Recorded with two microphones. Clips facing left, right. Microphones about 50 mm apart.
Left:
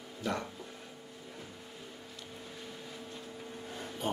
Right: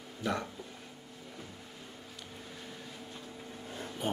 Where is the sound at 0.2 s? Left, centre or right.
Centre.